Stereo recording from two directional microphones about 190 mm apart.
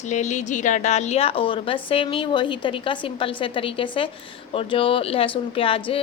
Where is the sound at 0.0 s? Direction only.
40° left (ahead or behind).